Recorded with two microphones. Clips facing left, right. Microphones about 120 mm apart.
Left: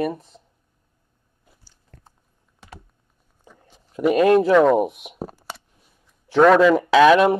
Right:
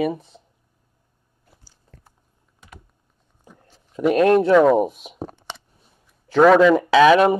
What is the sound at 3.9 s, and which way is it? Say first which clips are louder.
Speech: even; centre (ahead or behind).